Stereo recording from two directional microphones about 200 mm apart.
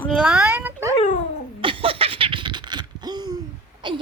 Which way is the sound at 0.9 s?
35° left (ahead or behind).